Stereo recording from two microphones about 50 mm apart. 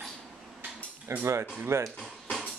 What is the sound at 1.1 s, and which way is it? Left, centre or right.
Speech, right.